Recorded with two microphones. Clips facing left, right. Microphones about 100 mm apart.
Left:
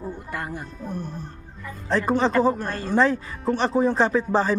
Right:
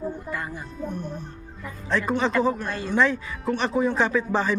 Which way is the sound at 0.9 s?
35° left (ahead or behind).